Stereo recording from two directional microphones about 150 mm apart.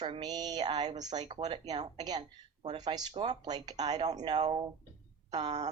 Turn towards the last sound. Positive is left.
turn(degrees=-30)  # may be behind; listen again after turning